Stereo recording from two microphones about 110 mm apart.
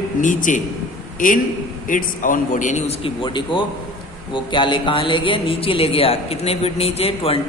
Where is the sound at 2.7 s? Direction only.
75° left (ahead or behind).